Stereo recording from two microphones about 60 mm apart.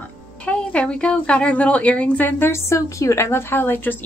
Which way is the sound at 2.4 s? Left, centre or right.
Left.